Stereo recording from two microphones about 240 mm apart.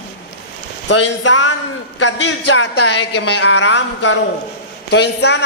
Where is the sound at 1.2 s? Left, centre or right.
Left.